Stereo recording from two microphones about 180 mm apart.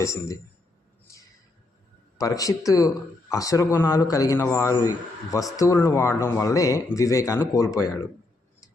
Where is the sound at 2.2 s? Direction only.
20° left (ahead or behind).